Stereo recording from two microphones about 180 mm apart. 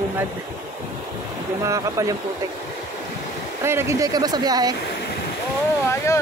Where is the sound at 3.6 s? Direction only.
15° right (ahead or behind).